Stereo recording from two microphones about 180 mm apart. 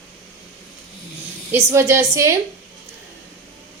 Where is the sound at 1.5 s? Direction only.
10° right (ahead or behind).